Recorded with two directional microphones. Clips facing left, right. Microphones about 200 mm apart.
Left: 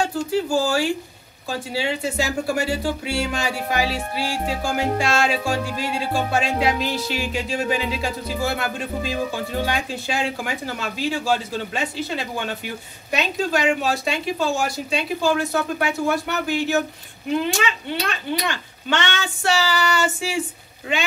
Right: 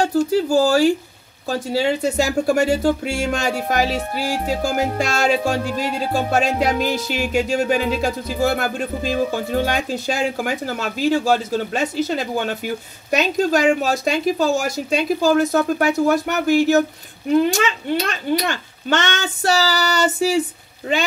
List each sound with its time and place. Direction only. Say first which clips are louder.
0.1 s a child's voice: right 5 dB; 40° right (ahead or behind)